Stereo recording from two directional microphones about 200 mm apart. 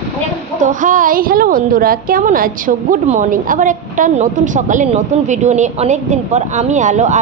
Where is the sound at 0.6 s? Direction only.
40° right (ahead or behind).